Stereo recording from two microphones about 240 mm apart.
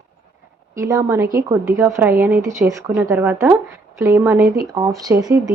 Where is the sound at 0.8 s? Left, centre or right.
Centre.